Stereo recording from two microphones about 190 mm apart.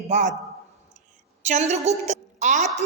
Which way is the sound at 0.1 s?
40° right (ahead or behind).